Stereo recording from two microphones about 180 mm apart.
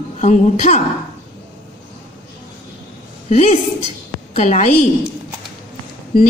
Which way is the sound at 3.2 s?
40° left (ahead or behind).